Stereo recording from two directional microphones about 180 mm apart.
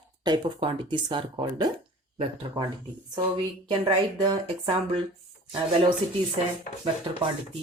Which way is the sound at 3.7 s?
25° right (ahead or behind).